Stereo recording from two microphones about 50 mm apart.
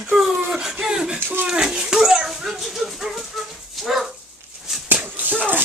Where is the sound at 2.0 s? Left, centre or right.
Centre.